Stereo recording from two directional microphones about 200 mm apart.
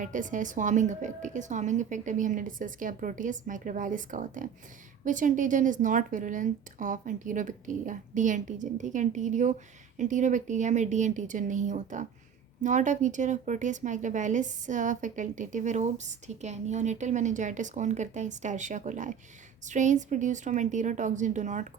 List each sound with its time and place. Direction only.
0.0 s a woman's voice: 40° right (ahead or behind)